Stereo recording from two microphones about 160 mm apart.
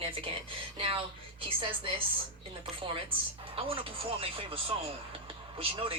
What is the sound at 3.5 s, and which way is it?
A woman's voice, 35° right (ahead or behind).